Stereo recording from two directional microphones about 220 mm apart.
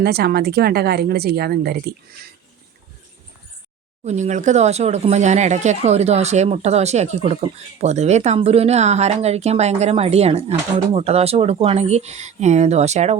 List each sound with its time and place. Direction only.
0.0 s speech: 45° right (ahead or behind)
4.0 s speech: 30° right (ahead or behind)